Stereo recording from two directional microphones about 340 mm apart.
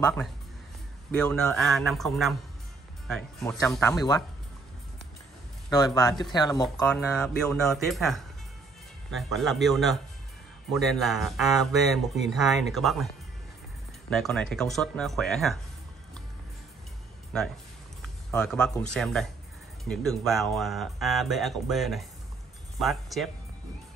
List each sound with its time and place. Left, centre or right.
1.1 s speech: centre
5.9 s speech: centre
14.1 s speech: centre
18.3 s speech: centre